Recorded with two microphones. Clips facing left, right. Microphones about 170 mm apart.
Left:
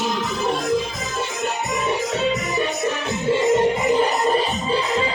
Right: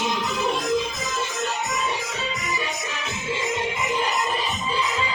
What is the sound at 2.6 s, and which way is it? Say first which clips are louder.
Music: left 8 dB; 60° left (ahead or behind).